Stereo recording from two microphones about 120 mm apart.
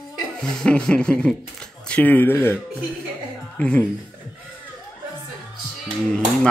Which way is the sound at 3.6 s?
10° left (ahead or behind).